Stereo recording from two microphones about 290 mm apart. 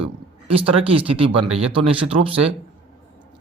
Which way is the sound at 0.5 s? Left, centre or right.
Centre.